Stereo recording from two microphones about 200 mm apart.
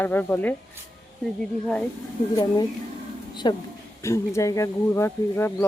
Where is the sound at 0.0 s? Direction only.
10° left (ahead or behind).